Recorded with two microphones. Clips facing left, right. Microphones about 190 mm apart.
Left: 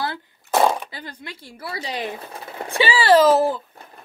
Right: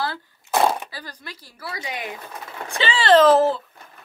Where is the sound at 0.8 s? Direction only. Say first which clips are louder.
Left 2 dB; 25° left (ahead or behind).